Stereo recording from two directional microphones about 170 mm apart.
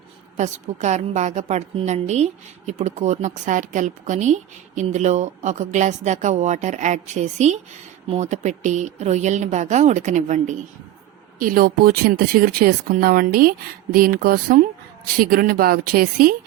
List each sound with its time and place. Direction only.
0.3 s a woman's voice: 45° right (ahead or behind)
11.3 s speech: 55° right (ahead or behind)